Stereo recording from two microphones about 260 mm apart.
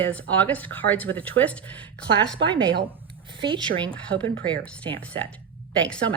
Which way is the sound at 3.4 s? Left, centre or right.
Centre.